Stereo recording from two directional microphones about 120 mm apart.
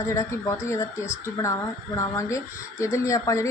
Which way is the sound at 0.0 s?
25° left (ahead or behind).